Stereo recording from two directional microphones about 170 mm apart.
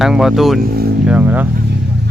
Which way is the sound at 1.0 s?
10° right (ahead or behind).